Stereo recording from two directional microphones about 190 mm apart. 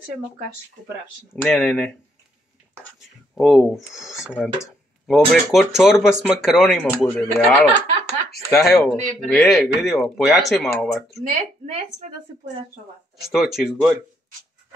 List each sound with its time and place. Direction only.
1.3 s speech: 5° left (ahead or behind)
3.3 s speech: centre (ahead or behind)
11.2 s a woman's voice: 35° right (ahead or behind)
13.3 s speech: centre (ahead or behind)